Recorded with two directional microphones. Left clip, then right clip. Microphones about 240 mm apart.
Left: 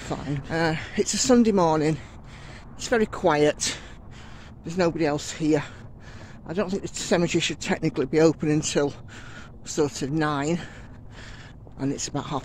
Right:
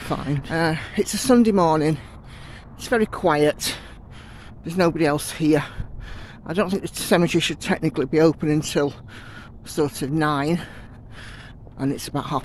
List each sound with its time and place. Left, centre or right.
0.0 s speech: right
11.8 s speech: centre